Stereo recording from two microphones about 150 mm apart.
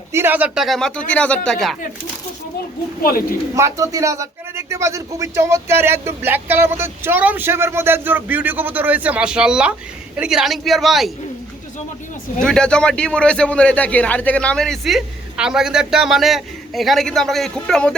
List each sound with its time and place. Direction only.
0.1 s a man's voice: 15° right (ahead or behind); by 1.7 s centre (ahead or behind)
3.0 s speech: 75° left (ahead or behind)
3.5 s a man's voice: 20° right (ahead or behind); by 11.1 s centre (ahead or behind)
12.4 s a man's voice: 5° left (ahead or behind)